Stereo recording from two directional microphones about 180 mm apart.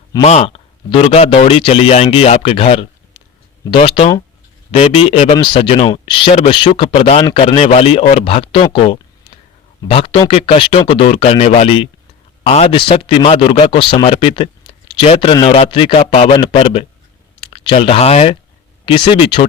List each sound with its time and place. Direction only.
0.2 s a man's voice: 35° left (ahead or behind)